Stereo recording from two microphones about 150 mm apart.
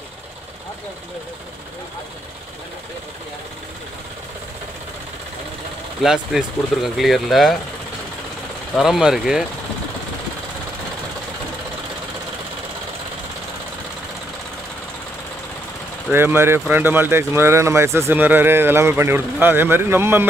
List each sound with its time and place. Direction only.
6.0 s speech: 5° right (ahead or behind)
8.7 s speech: centre (ahead or behind)
16.1 s speech: 15° right (ahead or behind)